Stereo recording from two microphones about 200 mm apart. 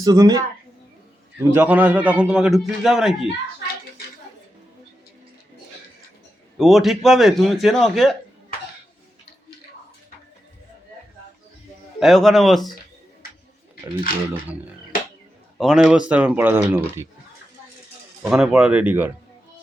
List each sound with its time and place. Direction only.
0.0 s a man's voice: 20° right (ahead or behind); by 3.2 s centre (ahead or behind)
6.6 s a man's voice: centre (ahead or behind)
11.9 s a man's voice: centre (ahead or behind)
15.5 s speech: centre (ahead or behind)
18.2 s speech: 5° right (ahead or behind)